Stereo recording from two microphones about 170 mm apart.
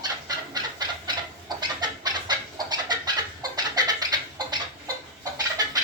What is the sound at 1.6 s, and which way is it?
Chicken, 25° right (ahead or behind).